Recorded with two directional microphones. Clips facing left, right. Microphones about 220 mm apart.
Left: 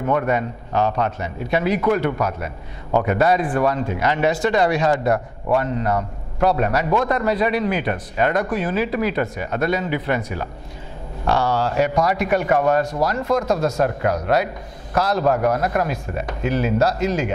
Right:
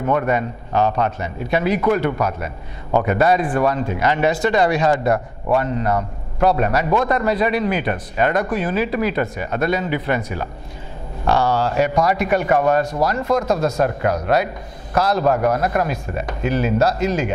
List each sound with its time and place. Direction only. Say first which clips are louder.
0.0 s a man's voice: right 1 dB; 20° right (ahead or behind)